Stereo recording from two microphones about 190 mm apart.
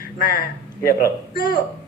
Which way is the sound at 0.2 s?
55° left (ahead or behind).